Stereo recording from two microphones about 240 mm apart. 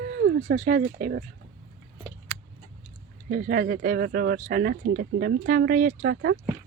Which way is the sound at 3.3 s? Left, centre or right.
Right.